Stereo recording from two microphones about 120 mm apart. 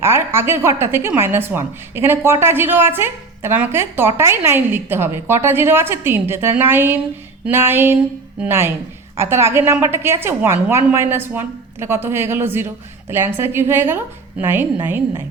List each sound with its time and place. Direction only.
0.0 s a woman's voice: 20° right (ahead or behind)
7.4 s a sound: 20° right (ahead or behind)
8.4 s a woman's voice: 20° right (ahead or behind)